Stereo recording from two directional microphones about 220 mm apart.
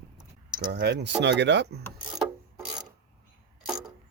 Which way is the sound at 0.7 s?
50° right (ahead or behind).